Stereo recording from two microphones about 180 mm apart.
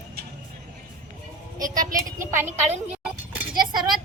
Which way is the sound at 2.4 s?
40° right (ahead or behind).